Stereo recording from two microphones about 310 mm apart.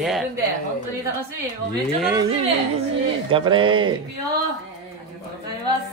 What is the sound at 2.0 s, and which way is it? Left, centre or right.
Speech, centre.